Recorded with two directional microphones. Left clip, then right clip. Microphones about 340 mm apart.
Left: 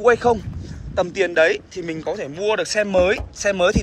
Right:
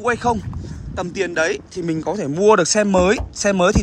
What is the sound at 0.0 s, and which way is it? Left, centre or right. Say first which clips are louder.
Speech: left 3 dB; centre.